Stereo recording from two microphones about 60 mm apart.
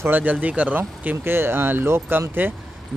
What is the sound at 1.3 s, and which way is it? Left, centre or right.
Speech, right.